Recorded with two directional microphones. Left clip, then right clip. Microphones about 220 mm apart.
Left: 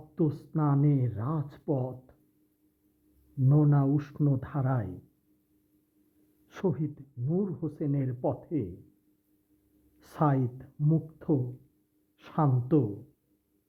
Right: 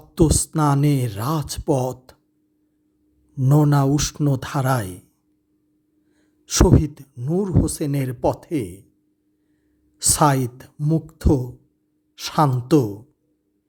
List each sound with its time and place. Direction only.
0.1 s speech: 35° right (ahead or behind)
3.4 s speech: 35° right (ahead or behind)
6.5 s speech: 30° right (ahead or behind)
10.0 s speech: 25° right (ahead or behind)